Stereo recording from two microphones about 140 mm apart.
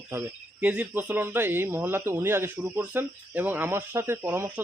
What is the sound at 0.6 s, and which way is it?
Speech, 10° right (ahead or behind).